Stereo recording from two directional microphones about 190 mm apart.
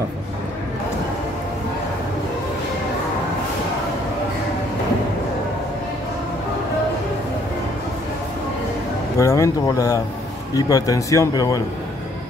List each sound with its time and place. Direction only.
9.2 s speech: 15° left (ahead or behind)